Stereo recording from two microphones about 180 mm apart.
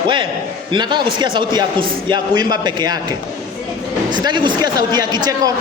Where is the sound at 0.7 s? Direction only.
25° right (ahead or behind).